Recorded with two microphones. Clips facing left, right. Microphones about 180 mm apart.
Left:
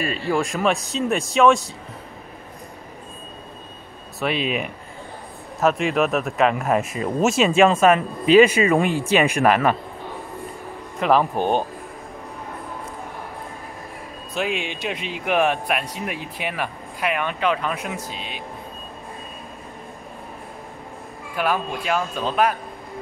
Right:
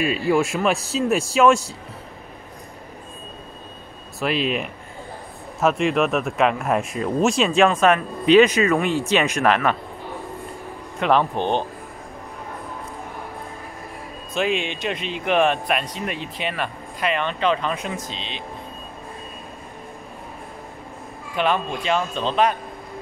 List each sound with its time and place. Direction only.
0.0 s speech: 5° right (ahead or behind)
4.2 s speech: centre (ahead or behind)
11.0 s speech: 5° left (ahead or behind)
14.3 s speech: 10° left (ahead or behind)
21.4 s speech: 5° left (ahead or behind)